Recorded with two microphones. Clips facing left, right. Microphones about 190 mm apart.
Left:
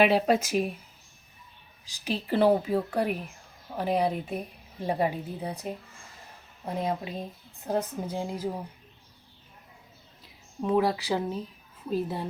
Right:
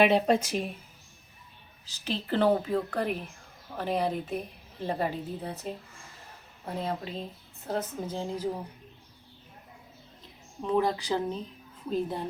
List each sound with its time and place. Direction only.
0.0 s speech: 5° left (ahead or behind)
1.9 s speech: 10° left (ahead or behind)
6.7 s speech: 15° left (ahead or behind)
10.6 s speech: 5° left (ahead or behind)